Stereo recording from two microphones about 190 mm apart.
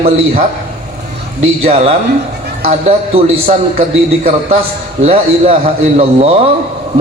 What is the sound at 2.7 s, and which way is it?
A man's voice, 30° right (ahead or behind).